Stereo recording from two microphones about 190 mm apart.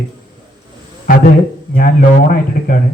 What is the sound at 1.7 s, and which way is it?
Speech, 45° left (ahead or behind).